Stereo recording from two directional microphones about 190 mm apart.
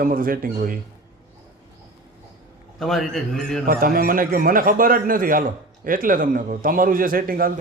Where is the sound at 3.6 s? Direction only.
50° right (ahead or behind).